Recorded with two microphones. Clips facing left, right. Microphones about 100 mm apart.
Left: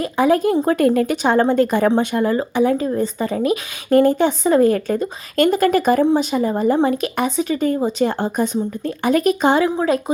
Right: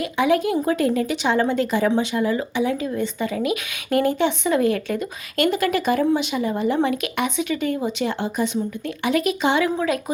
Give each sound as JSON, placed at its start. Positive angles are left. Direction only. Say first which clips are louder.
{"t": 0.0, "sound": "speech", "louder": "left 4 dB", "side_deg": 40}